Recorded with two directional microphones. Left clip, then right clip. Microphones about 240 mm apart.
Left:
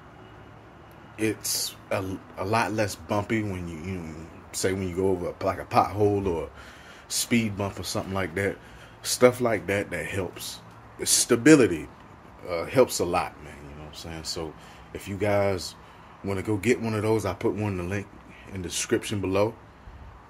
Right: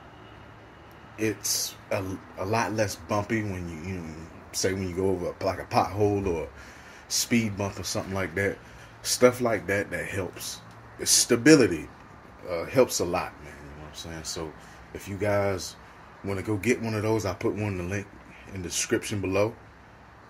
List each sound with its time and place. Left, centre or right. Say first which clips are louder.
2.5 s speech: left 1 dB; centre
7.8 s speech: left 1 dB; centre
8.1 s speech: even; centre